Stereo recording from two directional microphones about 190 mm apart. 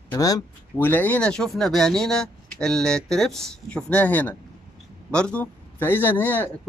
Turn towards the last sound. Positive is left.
turn(degrees=10)  # may be behind; listen again after turning